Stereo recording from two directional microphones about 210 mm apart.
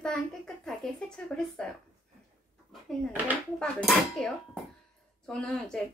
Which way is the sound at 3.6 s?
5° left (ahead or behind).